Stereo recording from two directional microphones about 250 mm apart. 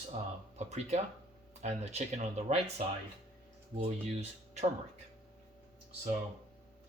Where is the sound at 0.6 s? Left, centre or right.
Right.